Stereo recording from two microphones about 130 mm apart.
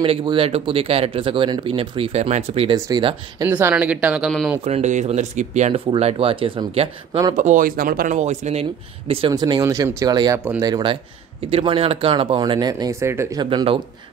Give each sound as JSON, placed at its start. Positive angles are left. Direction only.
{"t": 0.2, "sound": "speech", "side_deg": -40}
{"t": 2.7, "sound": "speech", "side_deg": -35}
{"t": 3.4, "sound": "speech", "side_deg": -15}
{"t": 4.6, "sound": "speech", "side_deg": -60}
{"t": 7.3, "sound": "speech", "side_deg": -80}
{"t": 9.3, "sound": "speech", "side_deg": -30}
{"t": 13.1, "sound": "speech", "side_deg": -20}
{"t": 13.4, "sound": "speech", "side_deg": -40}